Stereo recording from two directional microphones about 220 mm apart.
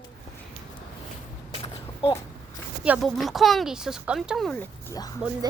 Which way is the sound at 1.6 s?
20° left (ahead or behind).